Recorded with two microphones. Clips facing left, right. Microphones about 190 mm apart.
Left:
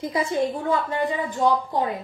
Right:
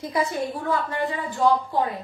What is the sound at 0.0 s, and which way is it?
Child singing, 20° left (ahead or behind).